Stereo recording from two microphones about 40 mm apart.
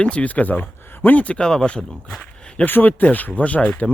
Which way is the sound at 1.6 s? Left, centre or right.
Left.